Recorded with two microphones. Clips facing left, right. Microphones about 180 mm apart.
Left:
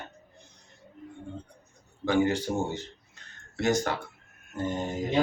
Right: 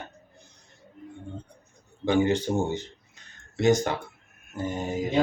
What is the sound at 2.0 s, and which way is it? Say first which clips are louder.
Speech: right 2 dB; 20° right (ahead or behind).